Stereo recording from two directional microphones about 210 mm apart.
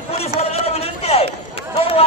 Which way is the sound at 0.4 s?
30° left (ahead or behind).